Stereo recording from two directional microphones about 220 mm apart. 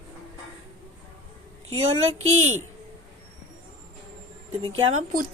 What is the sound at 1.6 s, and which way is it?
Speech, 70° right (ahead or behind).